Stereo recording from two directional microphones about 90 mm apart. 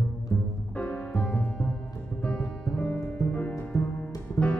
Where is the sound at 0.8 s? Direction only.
10° left (ahead or behind).